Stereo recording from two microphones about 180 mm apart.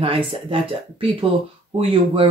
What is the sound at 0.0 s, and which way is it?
Speech, 30° right (ahead or behind).